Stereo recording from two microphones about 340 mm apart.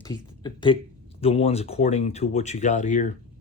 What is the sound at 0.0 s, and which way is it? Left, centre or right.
Speech, centre.